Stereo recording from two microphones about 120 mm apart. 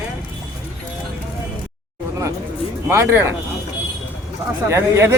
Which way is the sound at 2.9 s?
20° right (ahead or behind).